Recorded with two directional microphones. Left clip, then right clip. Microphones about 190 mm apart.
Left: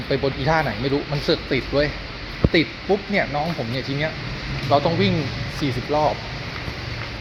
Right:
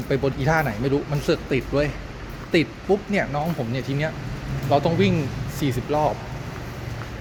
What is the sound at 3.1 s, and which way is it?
Speech, 20° right (ahead or behind).